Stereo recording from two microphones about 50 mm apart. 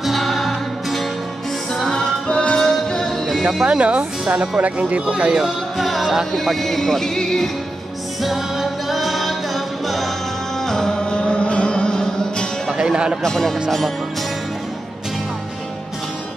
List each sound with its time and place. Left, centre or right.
0.0 s music: centre
2.2 s music: centre
3.6 s speech: right
5.8 s music: centre
8.2 s music: centre
12.7 s speech: centre
13.2 s speech: centre
13.7 s music: centre